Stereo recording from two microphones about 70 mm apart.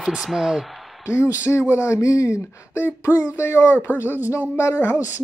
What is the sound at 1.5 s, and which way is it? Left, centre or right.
Speech, left.